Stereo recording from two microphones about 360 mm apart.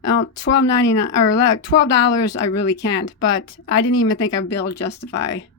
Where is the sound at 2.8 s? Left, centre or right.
Left.